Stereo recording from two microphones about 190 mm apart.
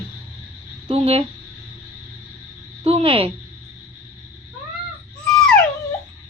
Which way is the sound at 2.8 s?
30° right (ahead or behind).